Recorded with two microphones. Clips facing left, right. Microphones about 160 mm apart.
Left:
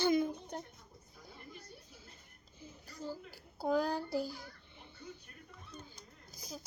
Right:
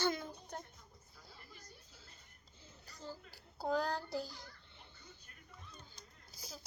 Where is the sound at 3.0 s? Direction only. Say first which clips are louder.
Left 6 dB; 10° left (ahead or behind).